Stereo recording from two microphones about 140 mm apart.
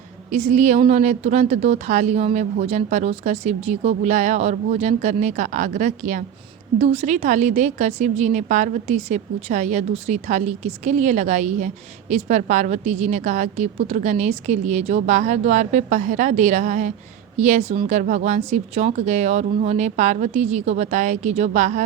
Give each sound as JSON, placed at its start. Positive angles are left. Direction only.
{"t": 0.3, "sound": "a woman's voice", "side_deg": -55}
{"t": 6.7, "sound": "a woman's voice", "side_deg": -50}